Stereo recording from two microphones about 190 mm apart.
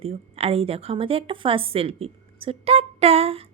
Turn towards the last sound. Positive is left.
turn(degrees=-30)  # may be behind; listen again after turning